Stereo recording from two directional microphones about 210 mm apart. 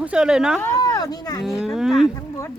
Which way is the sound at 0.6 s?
15° left (ahead or behind).